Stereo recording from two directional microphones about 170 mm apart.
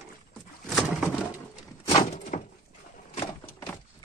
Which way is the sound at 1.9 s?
40° left (ahead or behind).